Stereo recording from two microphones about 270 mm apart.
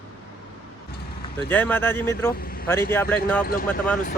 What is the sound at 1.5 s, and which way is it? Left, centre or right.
Speech, centre.